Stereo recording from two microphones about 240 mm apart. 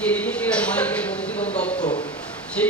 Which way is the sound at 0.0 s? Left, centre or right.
Centre.